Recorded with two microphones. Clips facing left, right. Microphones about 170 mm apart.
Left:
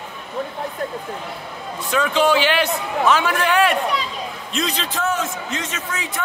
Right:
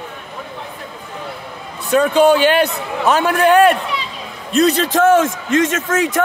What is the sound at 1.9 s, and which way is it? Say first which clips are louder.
A man's voice: right 6 dB; 45° right (ahead or behind).